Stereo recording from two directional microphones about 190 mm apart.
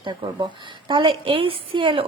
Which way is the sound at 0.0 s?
25° right (ahead or behind).